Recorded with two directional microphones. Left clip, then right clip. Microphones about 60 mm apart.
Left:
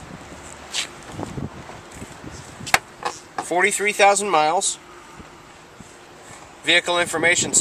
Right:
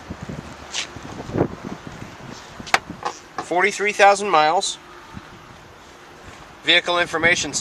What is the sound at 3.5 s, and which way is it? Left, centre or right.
Speech, centre.